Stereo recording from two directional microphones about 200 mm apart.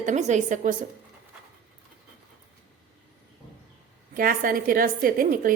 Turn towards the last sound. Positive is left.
turn(degrees=-45)  # may be behind; listen again after turning